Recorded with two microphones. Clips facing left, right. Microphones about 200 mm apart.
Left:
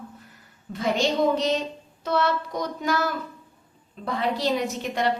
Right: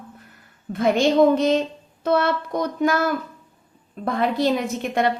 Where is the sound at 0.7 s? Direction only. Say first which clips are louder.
Right 6 dB; 55° right (ahead or behind).